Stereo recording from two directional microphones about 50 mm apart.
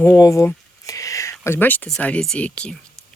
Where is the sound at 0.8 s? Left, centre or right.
Left.